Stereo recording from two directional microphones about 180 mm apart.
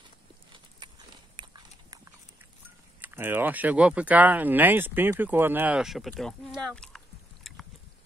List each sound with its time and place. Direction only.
0.7 s horse: 25° right (ahead or behind)
3.0 s speech: 10° right (ahead or behind)
7.5 s chewing: centre (ahead or behind)